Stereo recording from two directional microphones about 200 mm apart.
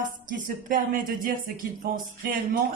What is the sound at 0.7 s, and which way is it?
Speech, 45° right (ahead or behind).